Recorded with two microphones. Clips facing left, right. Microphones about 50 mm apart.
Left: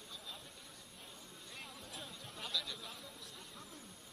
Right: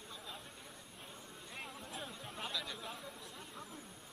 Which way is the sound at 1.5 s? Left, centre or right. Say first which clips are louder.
Right 4 dB; right.